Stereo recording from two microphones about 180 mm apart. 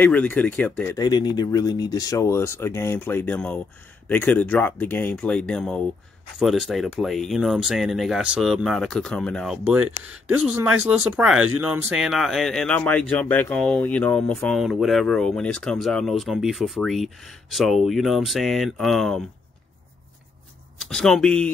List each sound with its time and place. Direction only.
0.0 s speech: 10° left (ahead or behind)
0.9 s speech: 25° left (ahead or behind); by 9.6 s 5° left (ahead or behind)
9.7 s speech: 10° right (ahead or behind)
20.9 s speech: 5° left (ahead or behind)